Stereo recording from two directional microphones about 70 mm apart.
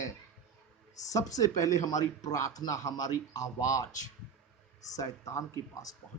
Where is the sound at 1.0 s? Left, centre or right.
Left.